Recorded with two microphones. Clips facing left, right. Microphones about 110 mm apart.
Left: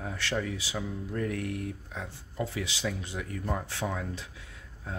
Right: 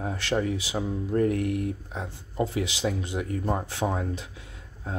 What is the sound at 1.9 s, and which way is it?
Speech, 25° right (ahead or behind).